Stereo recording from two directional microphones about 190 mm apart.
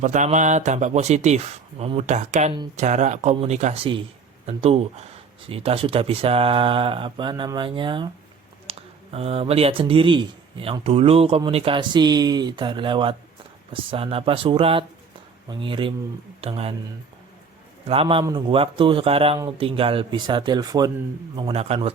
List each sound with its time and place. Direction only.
0.0 s speech: 40° right (ahead or behind)
8.7 s a sound: 30° right (ahead or behind)
9.1 s speech: 30° right (ahead or behind)
17.8 s speech: 30° right (ahead or behind)